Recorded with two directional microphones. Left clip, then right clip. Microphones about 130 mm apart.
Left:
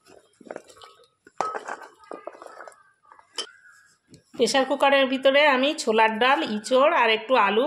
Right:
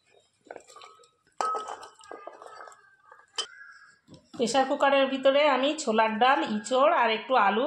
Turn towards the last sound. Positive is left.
turn(degrees=45)  # may be behind; listen again after turning